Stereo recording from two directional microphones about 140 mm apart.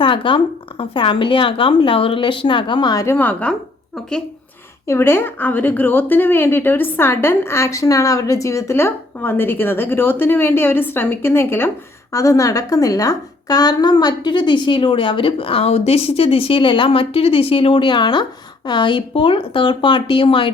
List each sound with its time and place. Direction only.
0.0 s speech: 35° left (ahead or behind)
3.2 s a woman's voice: 10° left (ahead or behind)
4.9 s a woman's voice: 15° left (ahead or behind); by 20.5 s 40° left (ahead or behind)